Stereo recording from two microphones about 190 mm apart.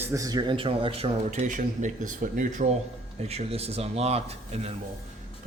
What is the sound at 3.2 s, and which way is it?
Speech, 30° right (ahead or behind).